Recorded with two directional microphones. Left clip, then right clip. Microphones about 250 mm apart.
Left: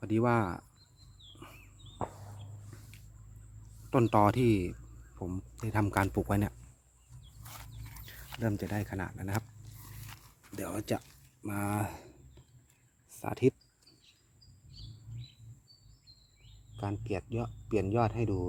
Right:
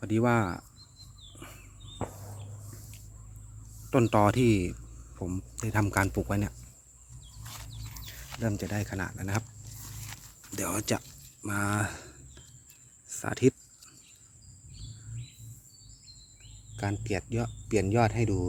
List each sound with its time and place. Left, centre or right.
0.0 s speech: centre
1.4 s walk: centre
2.0 s a sound: left
3.8 s speech: centre
7.4 s a sound: centre
7.9 s dog: centre
8.4 s speech: centre
9.8 s dog: centre
11.4 s a sound: centre
13.1 s cricket: centre
16.8 s speech: centre